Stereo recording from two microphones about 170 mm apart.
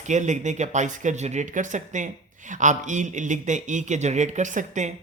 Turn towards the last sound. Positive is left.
turn(degrees=-45)  # may be behind; listen again after turning